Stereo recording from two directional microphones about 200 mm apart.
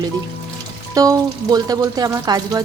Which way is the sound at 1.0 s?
20° right (ahead or behind).